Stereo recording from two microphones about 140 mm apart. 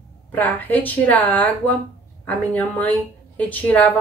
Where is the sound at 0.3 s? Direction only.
10° left (ahead or behind).